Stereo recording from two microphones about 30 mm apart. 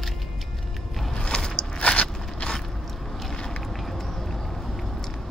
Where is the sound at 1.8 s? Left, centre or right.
Left.